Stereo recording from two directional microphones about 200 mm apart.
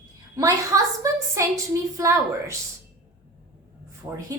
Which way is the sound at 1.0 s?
15° right (ahead or behind).